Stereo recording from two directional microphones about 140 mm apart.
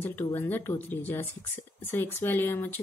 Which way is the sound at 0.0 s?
15° left (ahead or behind).